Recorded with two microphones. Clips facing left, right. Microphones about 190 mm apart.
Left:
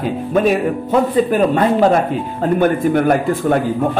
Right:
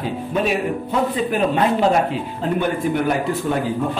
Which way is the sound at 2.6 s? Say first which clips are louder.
Left 7 dB; 55° left (ahead or behind).